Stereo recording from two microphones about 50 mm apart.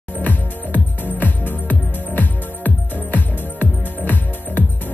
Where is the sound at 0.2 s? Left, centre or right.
Left.